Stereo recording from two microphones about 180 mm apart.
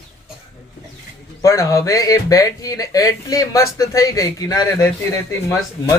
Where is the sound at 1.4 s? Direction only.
15° left (ahead or behind).